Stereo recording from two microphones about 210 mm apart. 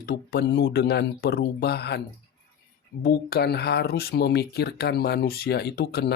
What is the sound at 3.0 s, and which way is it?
Speech, 50° left (ahead or behind).